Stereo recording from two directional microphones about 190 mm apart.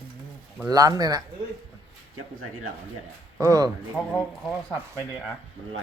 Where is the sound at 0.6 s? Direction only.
20° right (ahead or behind).